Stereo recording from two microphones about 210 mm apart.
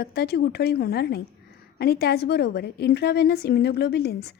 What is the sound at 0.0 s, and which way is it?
A woman's voice, 50° left (ahead or behind).